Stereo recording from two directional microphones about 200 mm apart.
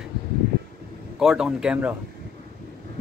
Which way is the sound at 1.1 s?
5° right (ahead or behind).